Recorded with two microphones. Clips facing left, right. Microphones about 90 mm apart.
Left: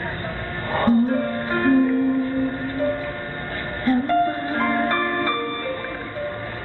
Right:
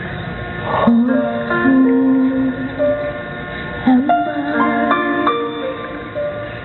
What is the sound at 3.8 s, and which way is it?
Music, 40° right (ahead or behind).